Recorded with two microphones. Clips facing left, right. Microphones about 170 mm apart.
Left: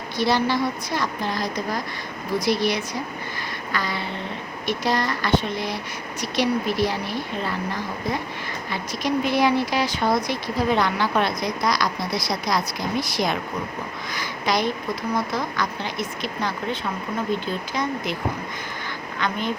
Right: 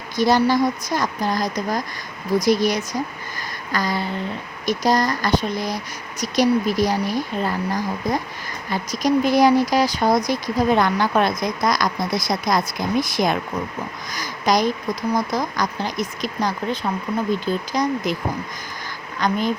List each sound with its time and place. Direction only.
0.2 s a woman's voice: 45° right (ahead or behind)
19.2 s speech: 40° right (ahead or behind)